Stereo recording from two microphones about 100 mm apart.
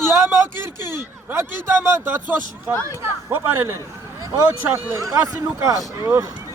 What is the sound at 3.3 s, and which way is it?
Speech, 20° right (ahead or behind).